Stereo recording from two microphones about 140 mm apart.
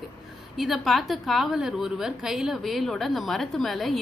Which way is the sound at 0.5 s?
Centre (ahead or behind).